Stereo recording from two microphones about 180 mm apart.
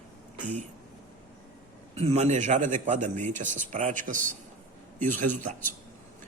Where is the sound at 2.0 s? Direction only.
35° right (ahead or behind).